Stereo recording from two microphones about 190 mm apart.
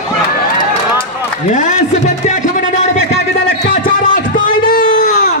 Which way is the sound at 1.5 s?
40° left (ahead or behind).